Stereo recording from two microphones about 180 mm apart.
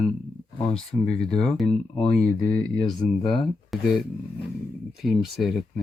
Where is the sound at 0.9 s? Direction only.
30° left (ahead or behind).